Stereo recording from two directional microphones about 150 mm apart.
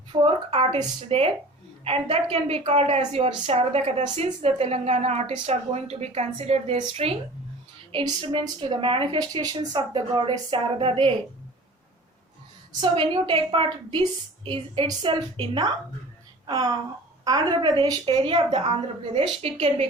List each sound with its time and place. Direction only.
0.1 s a woman's voice: 35° right (ahead or behind)
12.8 s a woman's voice: 35° right (ahead or behind)